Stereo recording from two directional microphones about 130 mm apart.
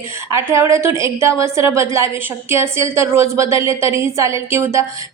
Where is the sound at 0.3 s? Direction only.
20° right (ahead or behind).